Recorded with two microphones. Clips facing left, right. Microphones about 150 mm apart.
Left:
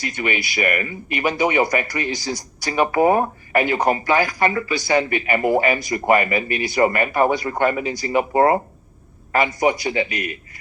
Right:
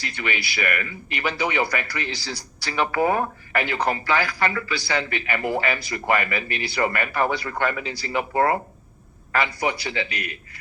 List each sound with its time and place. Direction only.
0.0 s speech: 20° left (ahead or behind)